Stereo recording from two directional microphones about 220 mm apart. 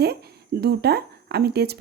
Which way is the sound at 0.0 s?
45° right (ahead or behind).